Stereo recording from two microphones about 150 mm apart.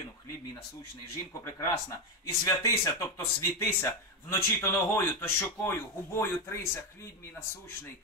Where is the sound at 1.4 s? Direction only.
20° left (ahead or behind).